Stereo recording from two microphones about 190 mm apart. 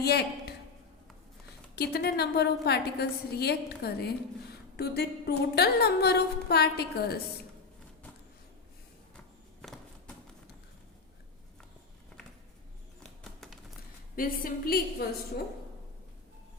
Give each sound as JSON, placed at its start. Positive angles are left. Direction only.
{"t": 0.0, "sound": "a woman's voice", "side_deg": 60}
{"t": 1.7, "sound": "a woman's voice", "side_deg": 55}
{"t": 9.1, "sound": "a sound", "side_deg": 0}
{"t": 13.0, "sound": "music", "side_deg": 0}
{"t": 14.2, "sound": "a woman's voice", "side_deg": 50}